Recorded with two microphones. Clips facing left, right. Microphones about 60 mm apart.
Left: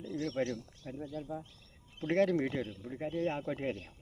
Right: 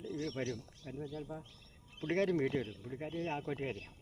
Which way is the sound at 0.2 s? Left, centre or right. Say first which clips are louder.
Left 6 dB; centre.